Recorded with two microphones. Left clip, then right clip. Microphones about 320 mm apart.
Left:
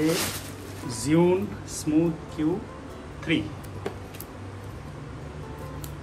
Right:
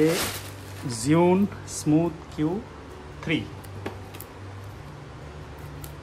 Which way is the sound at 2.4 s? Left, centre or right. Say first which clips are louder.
Even; centre.